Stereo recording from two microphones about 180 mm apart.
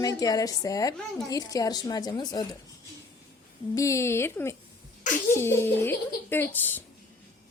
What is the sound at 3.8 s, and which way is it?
A child's voice, 15° left (ahead or behind).